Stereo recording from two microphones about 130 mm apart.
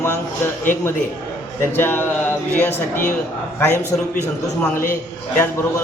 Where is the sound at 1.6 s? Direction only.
15° left (ahead or behind).